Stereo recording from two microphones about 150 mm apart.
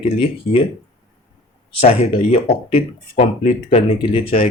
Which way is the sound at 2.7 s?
55° left (ahead or behind).